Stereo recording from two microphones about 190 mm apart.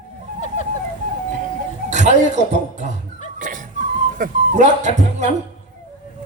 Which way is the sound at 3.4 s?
40° right (ahead or behind).